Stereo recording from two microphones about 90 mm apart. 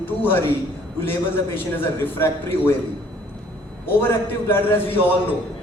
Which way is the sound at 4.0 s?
25° left (ahead or behind).